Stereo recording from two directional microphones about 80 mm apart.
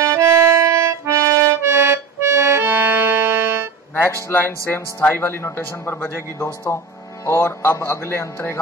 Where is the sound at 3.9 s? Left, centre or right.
Left.